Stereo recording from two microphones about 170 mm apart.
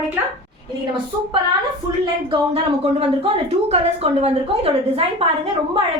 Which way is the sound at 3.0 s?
35° right (ahead or behind).